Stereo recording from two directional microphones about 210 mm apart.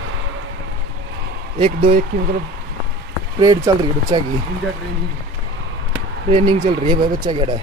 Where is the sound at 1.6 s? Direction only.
25° right (ahead or behind).